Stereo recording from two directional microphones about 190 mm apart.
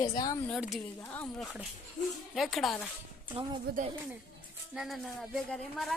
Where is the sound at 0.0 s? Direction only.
20° left (ahead or behind).